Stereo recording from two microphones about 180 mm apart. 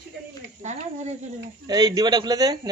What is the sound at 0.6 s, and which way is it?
Speech, 40° right (ahead or behind).